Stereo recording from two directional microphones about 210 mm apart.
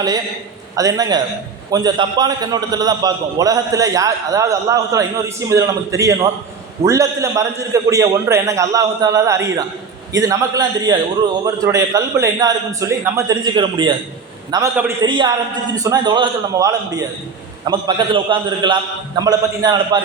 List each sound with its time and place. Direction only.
0.8 s a man's voice: 15° right (ahead or behind)